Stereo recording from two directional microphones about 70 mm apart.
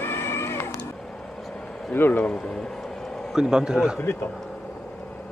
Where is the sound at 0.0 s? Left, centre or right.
Left.